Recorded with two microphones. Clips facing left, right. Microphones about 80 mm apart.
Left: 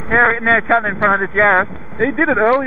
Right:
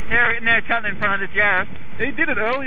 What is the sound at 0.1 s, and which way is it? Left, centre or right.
A man's voice, left.